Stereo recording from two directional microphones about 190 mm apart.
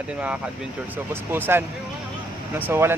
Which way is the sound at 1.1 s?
10° right (ahead or behind).